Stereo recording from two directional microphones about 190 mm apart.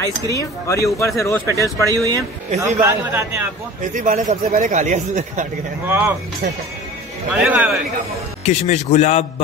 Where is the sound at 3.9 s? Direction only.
45° right (ahead or behind).